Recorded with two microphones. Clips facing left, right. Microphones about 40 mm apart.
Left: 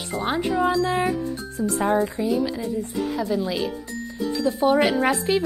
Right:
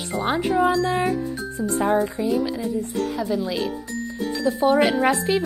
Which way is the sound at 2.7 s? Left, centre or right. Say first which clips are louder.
Right 1 dB; centre.